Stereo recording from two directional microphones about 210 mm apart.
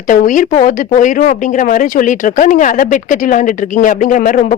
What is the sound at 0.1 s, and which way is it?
Speech, 40° left (ahead or behind).